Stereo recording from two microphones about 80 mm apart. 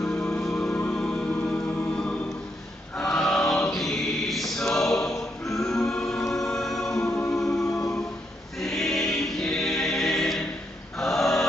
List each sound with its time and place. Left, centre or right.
0.1 s music: centre
1.3 s music: left
3.0 s chant: centre
4.7 s choir: centre
5.9 s music: centre
7.7 s music: left
8.5 s choir: centre
11.0 s a sound: centre